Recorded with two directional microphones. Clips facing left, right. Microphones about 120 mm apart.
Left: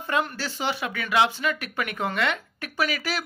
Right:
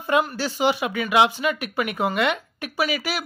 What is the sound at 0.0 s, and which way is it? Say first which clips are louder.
Speech: right 5 dB; 10° right (ahead or behind).